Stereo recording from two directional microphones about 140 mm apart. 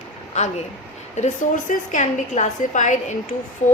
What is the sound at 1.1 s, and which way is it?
A woman's voice, 60° left (ahead or behind).